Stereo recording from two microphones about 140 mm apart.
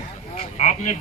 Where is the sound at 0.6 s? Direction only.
55° left (ahead or behind).